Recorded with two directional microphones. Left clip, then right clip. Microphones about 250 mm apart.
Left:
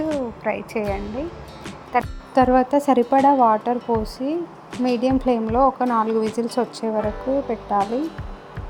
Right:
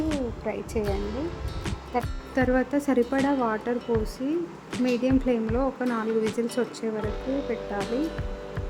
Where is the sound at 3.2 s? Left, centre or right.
Centre.